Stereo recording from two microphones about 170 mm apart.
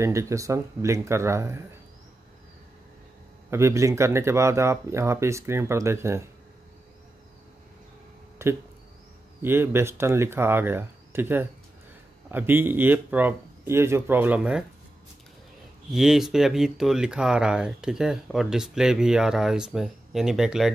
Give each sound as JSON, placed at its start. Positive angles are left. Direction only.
{"t": 0.0, "sound": "speech", "side_deg": -15}
{"t": 3.4, "sound": "speech", "side_deg": -15}
{"t": 8.4, "sound": "speech", "side_deg": -15}
{"t": 15.9, "sound": "speech", "side_deg": 0}